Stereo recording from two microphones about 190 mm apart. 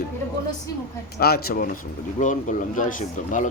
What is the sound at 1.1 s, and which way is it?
A man's voice, 55° left (ahead or behind).